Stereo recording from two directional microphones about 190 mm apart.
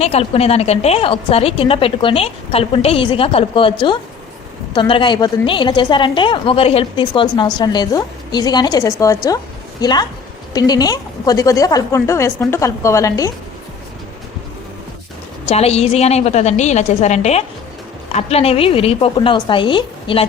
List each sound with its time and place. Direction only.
0.0 s a woman's voice: 35° left (ahead or behind); by 13.3 s 15° left (ahead or behind)
15.4 s a woman's voice: 35° left (ahead or behind)